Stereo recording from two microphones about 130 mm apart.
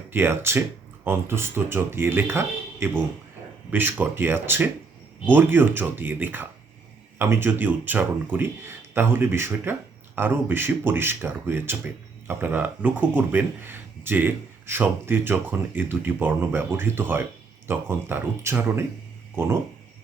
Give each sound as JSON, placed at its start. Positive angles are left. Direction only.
{"t": 0.1, "sound": "speech", "side_deg": -15}